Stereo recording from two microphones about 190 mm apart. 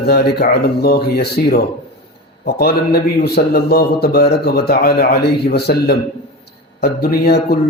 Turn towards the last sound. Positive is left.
turn(degrees=55)  # may be behind; listen again after turning